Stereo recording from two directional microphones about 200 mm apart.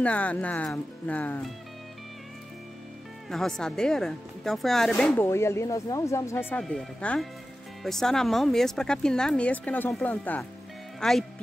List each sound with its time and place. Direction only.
0.0 s speech: 5° left (ahead or behind)
3.3 s speech: centre (ahead or behind)
5.1 s speech: 15° left (ahead or behind)